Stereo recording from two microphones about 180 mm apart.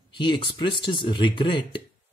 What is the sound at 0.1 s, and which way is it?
Speech, 25° left (ahead or behind).